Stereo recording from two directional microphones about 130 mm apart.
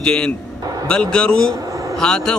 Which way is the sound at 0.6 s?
30° right (ahead or behind).